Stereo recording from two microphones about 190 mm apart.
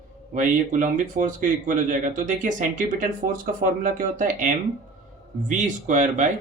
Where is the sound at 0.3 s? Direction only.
45° right (ahead or behind).